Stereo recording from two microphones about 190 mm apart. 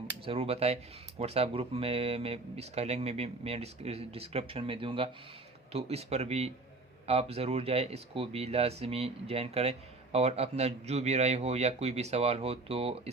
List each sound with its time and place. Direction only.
0.3 s speech: 30° right (ahead or behind)